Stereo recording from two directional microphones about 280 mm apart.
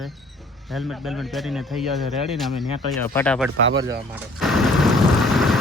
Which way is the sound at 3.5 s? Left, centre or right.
Right.